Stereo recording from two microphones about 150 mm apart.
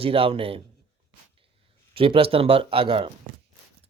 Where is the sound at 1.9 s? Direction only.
35° right (ahead or behind).